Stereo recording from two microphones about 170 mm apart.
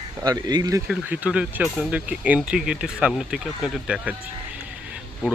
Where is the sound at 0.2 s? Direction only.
25° right (ahead or behind).